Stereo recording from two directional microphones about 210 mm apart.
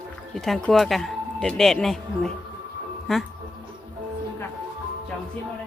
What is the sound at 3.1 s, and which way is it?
Speech, centre (ahead or behind).